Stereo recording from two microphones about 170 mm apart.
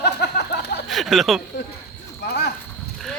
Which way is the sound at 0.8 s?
Centre (ahead or behind).